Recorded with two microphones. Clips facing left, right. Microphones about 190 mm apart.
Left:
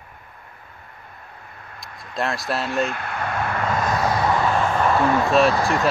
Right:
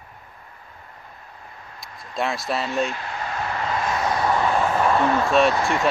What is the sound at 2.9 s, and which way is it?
Vehicle, 60° left (ahead or behind).